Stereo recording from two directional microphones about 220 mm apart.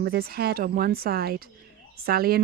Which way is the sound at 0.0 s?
45° right (ahead or behind).